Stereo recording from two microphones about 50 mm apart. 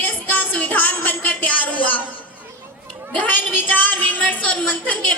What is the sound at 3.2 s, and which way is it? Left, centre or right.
A woman's voice, left.